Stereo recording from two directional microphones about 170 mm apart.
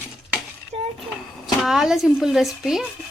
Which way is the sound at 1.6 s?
Centre (ahead or behind).